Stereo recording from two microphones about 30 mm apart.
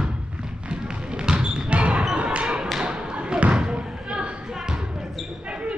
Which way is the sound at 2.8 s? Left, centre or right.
Right.